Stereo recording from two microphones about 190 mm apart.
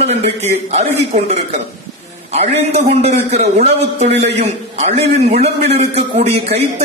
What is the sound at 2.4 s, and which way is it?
Speech, 35° right (ahead or behind).